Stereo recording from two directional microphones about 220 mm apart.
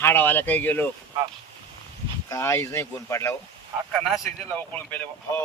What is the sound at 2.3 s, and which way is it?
Speech, 15° left (ahead or behind).